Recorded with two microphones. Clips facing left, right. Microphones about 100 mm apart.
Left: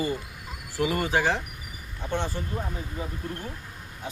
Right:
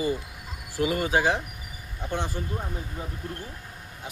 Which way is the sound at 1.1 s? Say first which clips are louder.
Right 2 dB; 15° right (ahead or behind).